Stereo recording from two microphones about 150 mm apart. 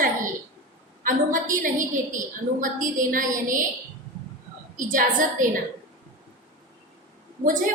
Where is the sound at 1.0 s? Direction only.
65° right (ahead or behind).